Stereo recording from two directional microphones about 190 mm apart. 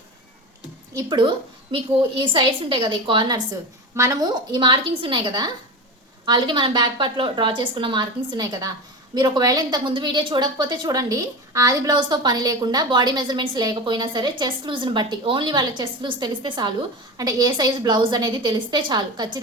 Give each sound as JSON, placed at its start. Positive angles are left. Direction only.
{"t": 0.9, "sound": "a woman's voice", "side_deg": -25}